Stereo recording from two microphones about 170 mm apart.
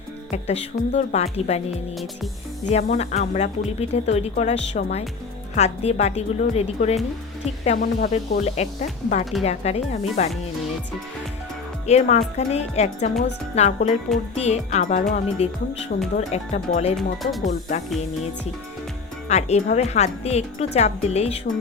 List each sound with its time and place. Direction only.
0.3 s speech: 40° left (ahead or behind)
2.6 s speech: 40° left (ahead or behind)
8.4 s speech: 40° left (ahead or behind)
11.9 s speech: 40° left (ahead or behind)
17.0 s speech: centre (ahead or behind)
19.3 s speech: 40° left (ahead or behind)